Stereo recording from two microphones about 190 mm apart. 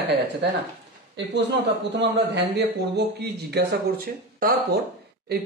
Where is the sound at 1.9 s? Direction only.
65° right (ahead or behind).